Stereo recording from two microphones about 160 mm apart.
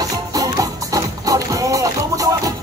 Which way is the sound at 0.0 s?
20° right (ahead or behind).